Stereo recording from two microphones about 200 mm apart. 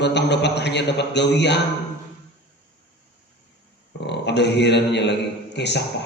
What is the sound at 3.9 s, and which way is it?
A man's voice, 60° left (ahead or behind).